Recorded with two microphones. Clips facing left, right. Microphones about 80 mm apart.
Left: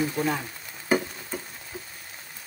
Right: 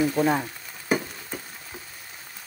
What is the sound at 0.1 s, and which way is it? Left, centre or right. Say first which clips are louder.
Speech: right 5 dB; right.